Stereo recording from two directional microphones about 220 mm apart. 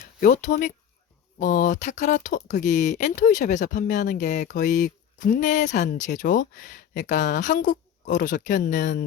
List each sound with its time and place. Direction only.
0.2 s speech: 35° left (ahead or behind)